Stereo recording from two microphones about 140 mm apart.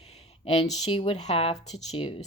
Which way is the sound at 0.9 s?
45° left (ahead or behind).